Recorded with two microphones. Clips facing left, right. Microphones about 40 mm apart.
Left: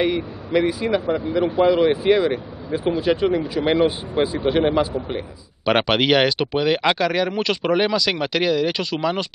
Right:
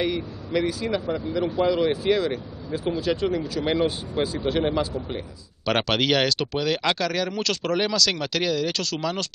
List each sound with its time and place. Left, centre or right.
0.0 s speech: left